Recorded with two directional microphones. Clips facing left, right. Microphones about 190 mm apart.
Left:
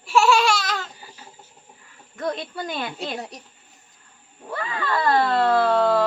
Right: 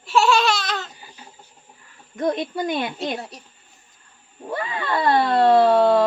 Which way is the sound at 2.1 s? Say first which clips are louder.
Right 5 dB; 15° right (ahead or behind).